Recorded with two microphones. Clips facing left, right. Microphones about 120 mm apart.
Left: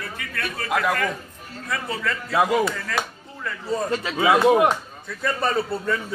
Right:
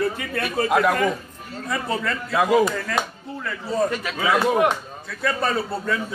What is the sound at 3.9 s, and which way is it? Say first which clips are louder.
Speech: left 3 dB; 25° left (ahead or behind).